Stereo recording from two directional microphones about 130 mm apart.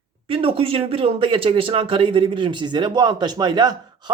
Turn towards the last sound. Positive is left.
turn(degrees=-35)  # may be behind; listen again after turning